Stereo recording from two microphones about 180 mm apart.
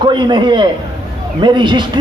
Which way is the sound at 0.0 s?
25° right (ahead or behind).